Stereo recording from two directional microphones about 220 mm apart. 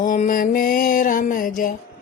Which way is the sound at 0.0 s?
35° left (ahead or behind).